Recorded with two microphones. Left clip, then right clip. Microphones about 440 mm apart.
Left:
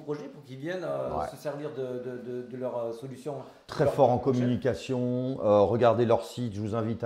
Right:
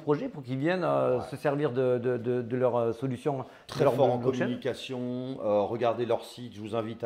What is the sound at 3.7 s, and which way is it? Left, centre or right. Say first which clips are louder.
Speech: left 1 dB; left.